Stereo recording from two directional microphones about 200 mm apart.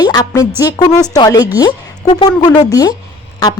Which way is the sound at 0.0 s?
20° left (ahead or behind).